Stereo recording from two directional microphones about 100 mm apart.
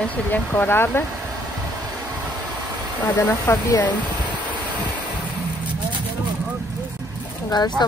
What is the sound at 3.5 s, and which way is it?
Speech, 25° left (ahead or behind).